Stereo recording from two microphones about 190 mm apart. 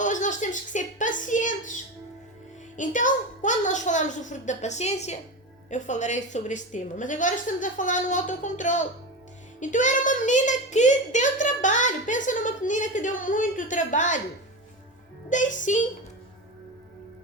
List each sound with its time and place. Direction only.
0.0 s a sound: 40° left (ahead or behind)
2.7 s a child's voice: 40° left (ahead or behind)
15.3 s a child's voice: 40° left (ahead or behind)